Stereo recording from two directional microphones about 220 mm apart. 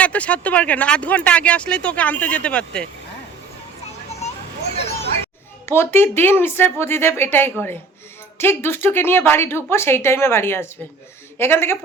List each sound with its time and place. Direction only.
0.0 s speech: 5° left (ahead or behind)
4.8 s hubbub: 30° left (ahead or behind)
5.6 s a woman's voice: 10° left (ahead or behind)